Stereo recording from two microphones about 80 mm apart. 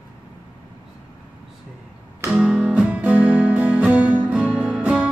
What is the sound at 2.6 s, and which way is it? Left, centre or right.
Music, centre.